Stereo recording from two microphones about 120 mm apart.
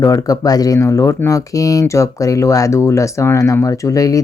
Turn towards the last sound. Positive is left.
turn(degrees=30)  # may be behind; listen again after turning